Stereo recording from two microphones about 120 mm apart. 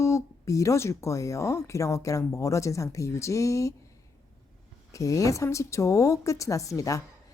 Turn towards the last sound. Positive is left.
turn(degrees=25)  # may be behind; listen again after turning